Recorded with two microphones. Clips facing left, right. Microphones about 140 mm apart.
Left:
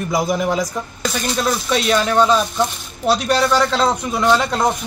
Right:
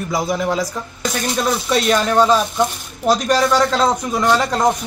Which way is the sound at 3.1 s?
40° right (ahead or behind).